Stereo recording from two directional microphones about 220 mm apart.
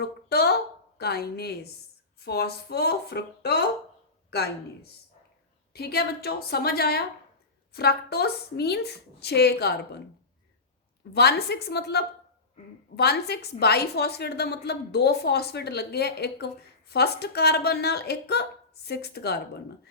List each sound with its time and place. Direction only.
0.0 s a sound: 45° left (ahead or behind)
2.2 s a woman's voice: 45° left (ahead or behind)
11.1 s a woman's voice: 45° left (ahead or behind)